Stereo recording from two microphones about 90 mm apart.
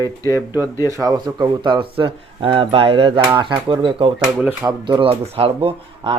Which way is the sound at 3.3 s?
65° right (ahead or behind).